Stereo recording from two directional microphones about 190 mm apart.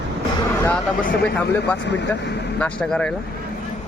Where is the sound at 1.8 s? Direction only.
65° left (ahead or behind).